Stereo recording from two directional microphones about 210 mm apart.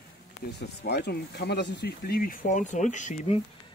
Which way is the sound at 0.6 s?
50° left (ahead or behind).